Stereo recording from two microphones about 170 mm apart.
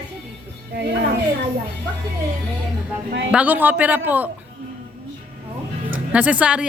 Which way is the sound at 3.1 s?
90° right.